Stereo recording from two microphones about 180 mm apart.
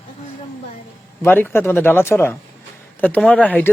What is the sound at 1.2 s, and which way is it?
Speech, 10° left (ahead or behind).